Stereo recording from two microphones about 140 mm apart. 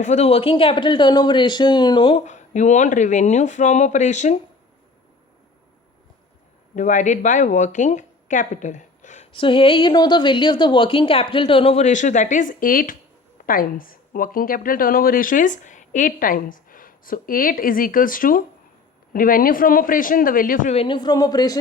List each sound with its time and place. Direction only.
0.0 s a woman's voice: 55° left (ahead or behind); by 2.2 s 40° left (ahead or behind)
2.2 s speech: 60° left (ahead or behind)
6.7 s speech: 60° left (ahead or behind)
9.3 s a woman's voice: 40° left (ahead or behind); by 13.0 s 80° left
13.4 s speech: 90° left
20.7 s a man's voice: 35° left (ahead or behind)